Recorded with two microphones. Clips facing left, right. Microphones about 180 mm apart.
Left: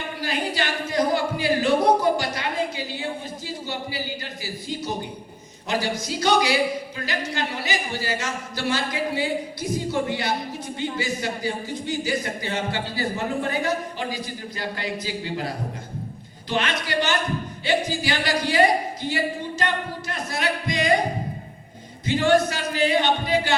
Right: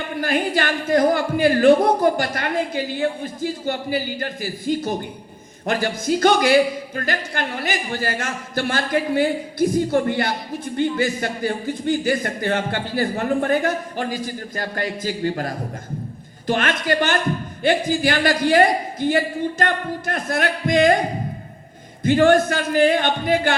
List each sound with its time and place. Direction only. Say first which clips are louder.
0.2 s a man's voice: right 6 dB; 50° right (ahead or behind)
22.0 s a man's voice: right 5 dB; 50° right (ahead or behind)